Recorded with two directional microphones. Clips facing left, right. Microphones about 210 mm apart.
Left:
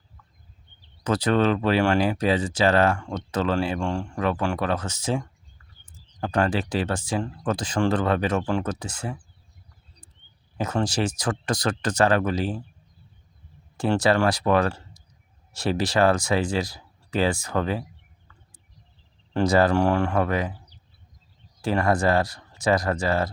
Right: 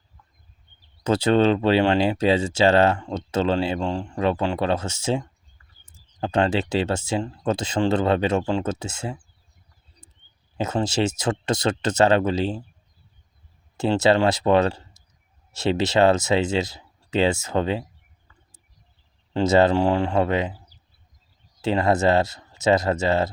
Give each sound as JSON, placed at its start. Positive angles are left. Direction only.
{"t": 1.0, "sound": "speech", "side_deg": -25}
{"t": 10.6, "sound": "speech", "side_deg": -25}
{"t": 13.7, "sound": "speech", "side_deg": -25}
{"t": 19.3, "sound": "speech", "side_deg": -25}
{"t": 21.6, "sound": "speech", "side_deg": -25}